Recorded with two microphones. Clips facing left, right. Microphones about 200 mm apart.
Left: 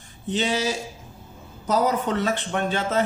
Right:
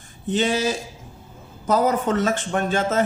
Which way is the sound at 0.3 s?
50° right (ahead or behind).